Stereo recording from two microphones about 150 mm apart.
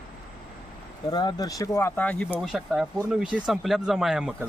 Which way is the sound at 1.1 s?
25° left (ahead or behind).